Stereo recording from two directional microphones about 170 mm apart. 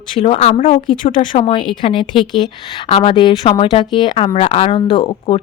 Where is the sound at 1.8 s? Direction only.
30° left (ahead or behind).